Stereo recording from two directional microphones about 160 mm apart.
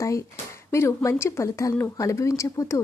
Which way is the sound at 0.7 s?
20° left (ahead or behind).